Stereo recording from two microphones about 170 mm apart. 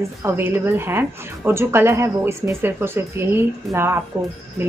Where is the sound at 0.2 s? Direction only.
10° right (ahead or behind).